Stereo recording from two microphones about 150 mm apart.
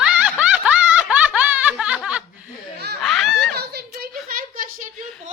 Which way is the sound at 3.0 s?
Centre (ahead or behind).